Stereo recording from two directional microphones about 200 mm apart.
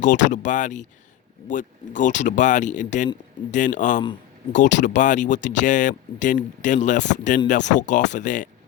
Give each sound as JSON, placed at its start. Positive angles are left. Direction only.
{"t": 0.0, "sound": "speech", "side_deg": 40}